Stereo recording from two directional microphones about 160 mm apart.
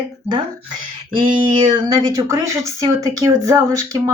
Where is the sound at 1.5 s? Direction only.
30° right (ahead or behind).